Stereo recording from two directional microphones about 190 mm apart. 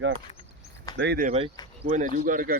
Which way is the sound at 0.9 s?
65° right (ahead or behind).